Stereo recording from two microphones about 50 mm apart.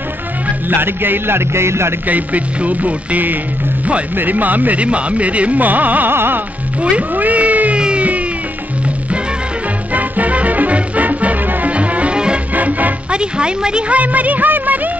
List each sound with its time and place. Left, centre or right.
0.7 s speech: right
2.0 s speech: right
6.1 s speech: right
6.8 s speech: right
7.8 s a sound: right
9.9 s music: right
12.5 s music: right
13.1 s speech: centre; by 14.9 s right